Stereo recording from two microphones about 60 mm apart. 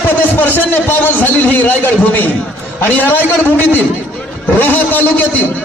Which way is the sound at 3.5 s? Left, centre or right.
Left.